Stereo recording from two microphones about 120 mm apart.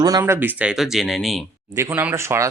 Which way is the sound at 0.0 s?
30° right (ahead or behind).